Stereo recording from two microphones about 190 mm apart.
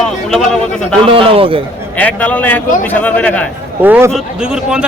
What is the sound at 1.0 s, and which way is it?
Speech, 30° right (ahead or behind).